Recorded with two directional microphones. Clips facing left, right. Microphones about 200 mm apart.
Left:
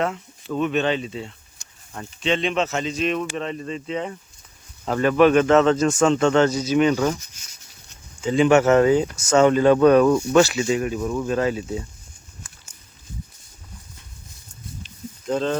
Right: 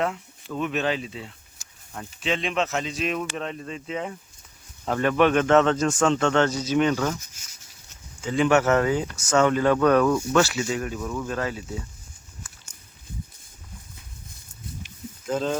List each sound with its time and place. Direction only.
0.6 s speech: 5° right (ahead or behind); by 7.2 s 15° left (ahead or behind)
8.2 s speech: 25° left (ahead or behind)
15.3 s speech: 5° right (ahead or behind)